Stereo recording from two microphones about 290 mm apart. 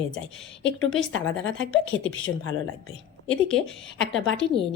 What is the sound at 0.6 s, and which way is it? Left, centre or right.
A woman's voice, left.